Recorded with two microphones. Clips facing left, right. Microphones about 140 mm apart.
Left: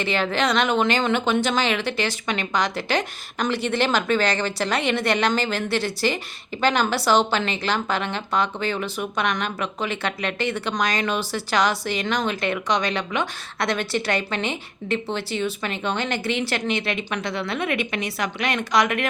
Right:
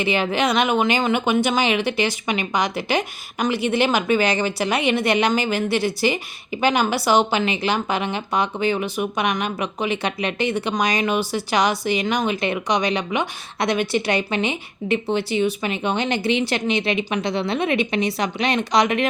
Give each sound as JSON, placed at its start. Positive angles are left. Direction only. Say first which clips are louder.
{"t": 0.0, "sound": "a woman's voice", "louder": "right 2 dB", "side_deg": -15}